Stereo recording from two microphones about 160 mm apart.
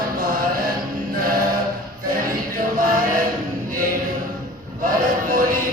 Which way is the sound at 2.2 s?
55° right (ahead or behind).